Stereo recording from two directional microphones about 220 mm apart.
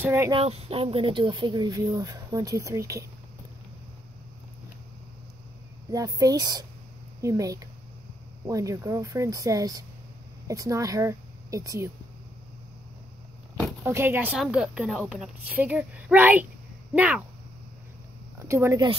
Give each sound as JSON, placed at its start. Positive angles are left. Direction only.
{"t": 0.0, "sound": "a woman's voice", "side_deg": -10}
{"t": 0.3, "sound": "speech", "side_deg": -25}
{"t": 5.9, "sound": "a woman's voice", "side_deg": -15}
{"t": 13.8, "sound": "a woman's voice", "side_deg": -10}
{"t": 18.5, "sound": "a woman's voice", "side_deg": -15}